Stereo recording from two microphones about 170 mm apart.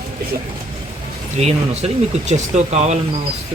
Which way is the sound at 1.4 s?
40° right (ahead or behind).